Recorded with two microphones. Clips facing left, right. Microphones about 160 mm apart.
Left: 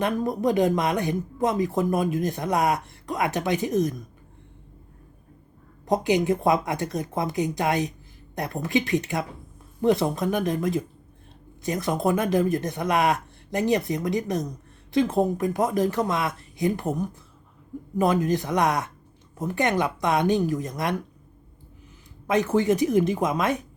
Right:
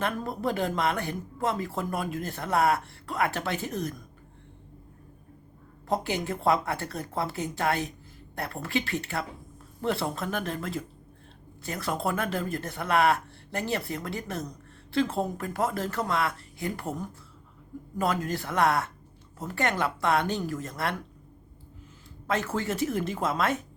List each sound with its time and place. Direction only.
0.0 s speech: 15° left (ahead or behind)
5.8 s speech: 15° left (ahead or behind)
22.3 s speech: 15° left (ahead or behind)